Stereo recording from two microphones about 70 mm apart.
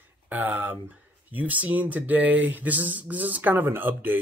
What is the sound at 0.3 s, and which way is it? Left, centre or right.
Speech, right.